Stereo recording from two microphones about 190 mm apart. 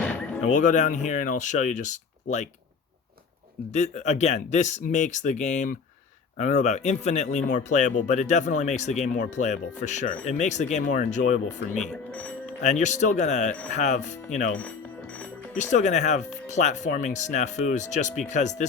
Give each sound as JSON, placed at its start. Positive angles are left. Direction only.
{"t": 0.0, "sound": "music", "side_deg": 5}
{"t": 0.4, "sound": "speech", "side_deg": 40}
{"t": 3.7, "sound": "speech", "side_deg": 40}
{"t": 11.8, "sound": "speech", "side_deg": 5}
{"t": 12.6, "sound": "speech", "side_deg": 40}
{"t": 15.5, "sound": "speech", "side_deg": 40}